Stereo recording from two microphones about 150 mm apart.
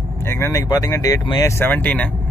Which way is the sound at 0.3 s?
20° left (ahead or behind).